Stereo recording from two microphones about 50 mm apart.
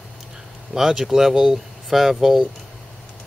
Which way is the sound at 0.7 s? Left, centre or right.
Centre.